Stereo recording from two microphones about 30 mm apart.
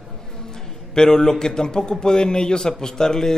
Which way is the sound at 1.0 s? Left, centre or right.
Left.